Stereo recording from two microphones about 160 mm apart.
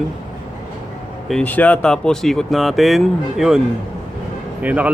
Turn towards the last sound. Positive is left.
turn(degrees=-10)  # may be behind; listen again after turning